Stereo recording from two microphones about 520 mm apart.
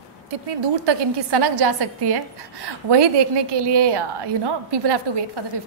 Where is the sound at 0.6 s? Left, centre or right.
Right.